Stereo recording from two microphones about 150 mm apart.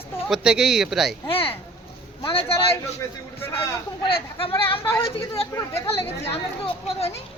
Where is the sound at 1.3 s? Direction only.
40° left (ahead or behind).